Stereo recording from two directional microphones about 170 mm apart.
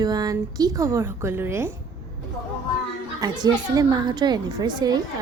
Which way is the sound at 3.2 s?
25° right (ahead or behind).